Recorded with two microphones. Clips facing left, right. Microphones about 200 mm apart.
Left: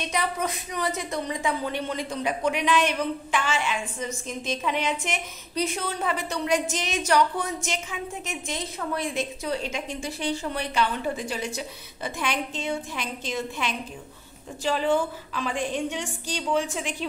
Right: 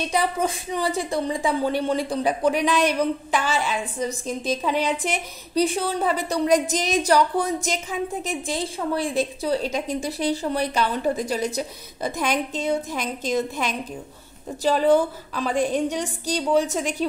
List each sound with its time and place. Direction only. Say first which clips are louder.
0.0 s a woman's voice: right 5 dB; 30° right (ahead or behind)